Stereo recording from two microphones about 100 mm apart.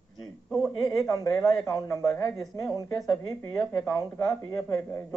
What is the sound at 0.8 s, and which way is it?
Speech, 30° left (ahead or behind).